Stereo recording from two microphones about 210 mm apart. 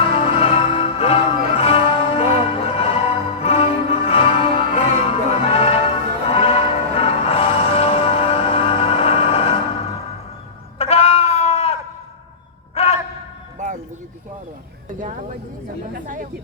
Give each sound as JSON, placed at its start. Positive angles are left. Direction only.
{"t": 0.0, "sound": "music", "side_deg": 25}
{"t": 10.8, "sound": "goat", "side_deg": 30}
{"t": 12.7, "sound": "a sound", "side_deg": 30}